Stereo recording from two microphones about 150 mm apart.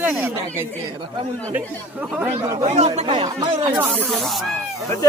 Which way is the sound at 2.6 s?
45° right (ahead or behind).